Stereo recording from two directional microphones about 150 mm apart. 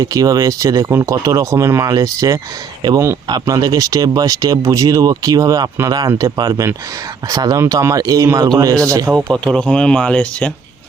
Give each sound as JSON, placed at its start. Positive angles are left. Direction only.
{"t": 0.0, "sound": "speech", "side_deg": -25}
{"t": 9.1, "sound": "speech", "side_deg": 5}